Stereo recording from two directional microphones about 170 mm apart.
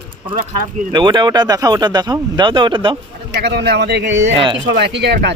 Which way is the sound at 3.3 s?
85° right.